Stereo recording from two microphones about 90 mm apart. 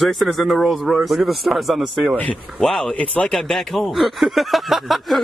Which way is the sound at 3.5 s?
Centre (ahead or behind).